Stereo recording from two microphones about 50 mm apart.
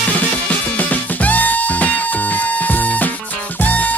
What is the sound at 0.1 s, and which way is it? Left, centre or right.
Music, left.